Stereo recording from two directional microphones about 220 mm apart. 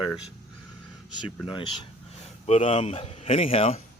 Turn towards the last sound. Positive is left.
turn(degrees=25)  # may be behind; listen again after turning